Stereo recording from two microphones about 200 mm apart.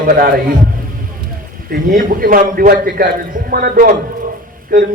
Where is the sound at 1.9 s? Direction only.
40° right (ahead or behind).